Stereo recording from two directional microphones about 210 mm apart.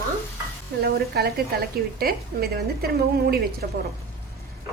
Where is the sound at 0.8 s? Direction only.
45° right (ahead or behind).